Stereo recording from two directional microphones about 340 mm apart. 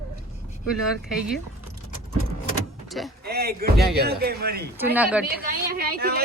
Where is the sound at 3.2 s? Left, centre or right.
Right.